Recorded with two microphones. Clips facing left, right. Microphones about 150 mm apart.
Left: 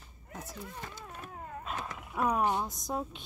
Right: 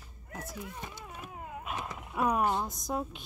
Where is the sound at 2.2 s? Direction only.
10° right (ahead or behind).